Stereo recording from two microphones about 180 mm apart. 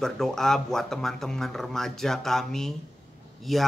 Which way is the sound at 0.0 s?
Centre (ahead or behind).